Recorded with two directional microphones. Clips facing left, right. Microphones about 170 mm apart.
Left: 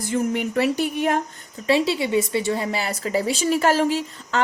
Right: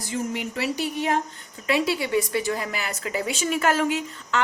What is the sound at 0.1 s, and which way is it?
A woman's voice, 55° left (ahead or behind).